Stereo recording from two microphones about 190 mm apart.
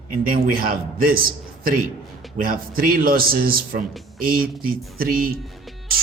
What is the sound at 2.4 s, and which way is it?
Speech, 50° right (ahead or behind).